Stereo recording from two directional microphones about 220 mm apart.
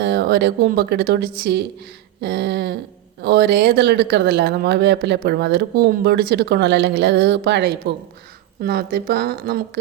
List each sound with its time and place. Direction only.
0.0 s speech: 45° right (ahead or behind)